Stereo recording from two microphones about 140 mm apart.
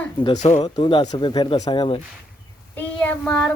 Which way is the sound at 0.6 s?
35° left (ahead or behind).